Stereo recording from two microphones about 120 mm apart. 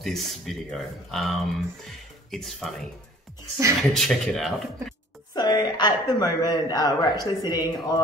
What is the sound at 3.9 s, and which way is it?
Speech, 5° left (ahead or behind).